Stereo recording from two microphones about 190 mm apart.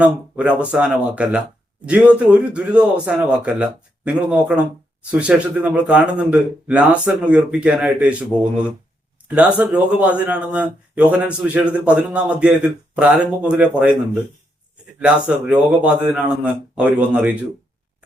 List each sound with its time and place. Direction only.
0.0 s a man's voice: 5° right (ahead or behind)
9.3 s speech: 5° right (ahead or behind)